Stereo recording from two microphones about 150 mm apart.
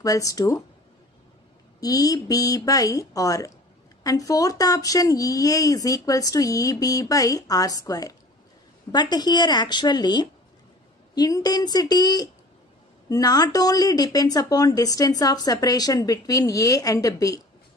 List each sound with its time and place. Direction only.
0.0 s speech: 25° left (ahead or behind)
1.8 s speech: 25° left (ahead or behind)